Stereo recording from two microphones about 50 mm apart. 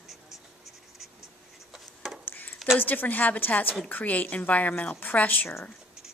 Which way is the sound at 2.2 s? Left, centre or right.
Left.